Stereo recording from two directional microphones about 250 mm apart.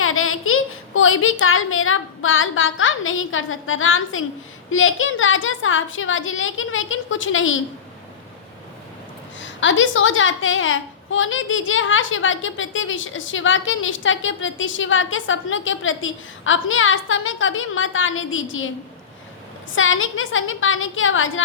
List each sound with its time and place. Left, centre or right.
0.0 s a sound: left
4.7 s a woman's voice: left
9.6 s a woman's voice: left
19.7 s a woman's voice: left